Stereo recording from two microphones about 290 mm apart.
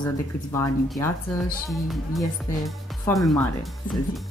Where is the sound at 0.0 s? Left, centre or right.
Centre.